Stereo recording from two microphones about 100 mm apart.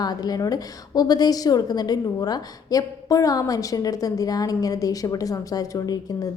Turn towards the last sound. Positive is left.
turn(degrees=40)  # may be behind; listen again after turning